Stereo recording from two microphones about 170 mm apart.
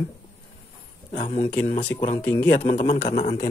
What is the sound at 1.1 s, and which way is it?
Speech, 45° left (ahead or behind).